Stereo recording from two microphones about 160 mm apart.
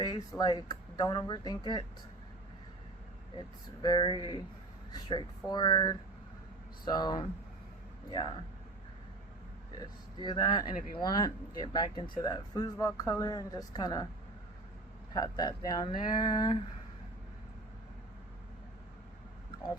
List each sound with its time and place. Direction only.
0.0 s speech: 25° left (ahead or behind)
3.8 s speech: 30° left (ahead or behind)
9.7 s speech: 25° left (ahead or behind)
15.1 s speech: 25° left (ahead or behind)